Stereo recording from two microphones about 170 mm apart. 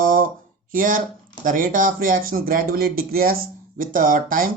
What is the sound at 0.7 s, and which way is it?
Speech, 55° right (ahead or behind).